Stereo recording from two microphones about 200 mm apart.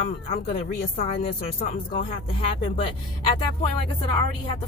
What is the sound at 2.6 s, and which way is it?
Speech, 30° left (ahead or behind).